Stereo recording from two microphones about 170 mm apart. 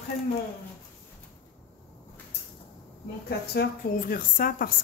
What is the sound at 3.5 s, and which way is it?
Speech, 60° left (ahead or behind).